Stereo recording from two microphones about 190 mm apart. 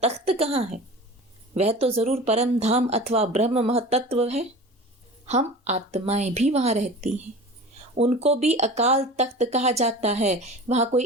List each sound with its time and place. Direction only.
0.0 s speech: 30° right (ahead or behind)